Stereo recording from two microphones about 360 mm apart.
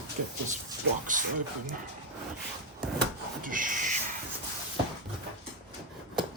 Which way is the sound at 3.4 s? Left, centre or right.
Right.